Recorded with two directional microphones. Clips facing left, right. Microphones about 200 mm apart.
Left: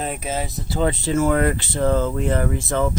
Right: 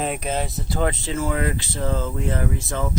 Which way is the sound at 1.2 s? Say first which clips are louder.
Left 6 dB; 55° left (ahead or behind).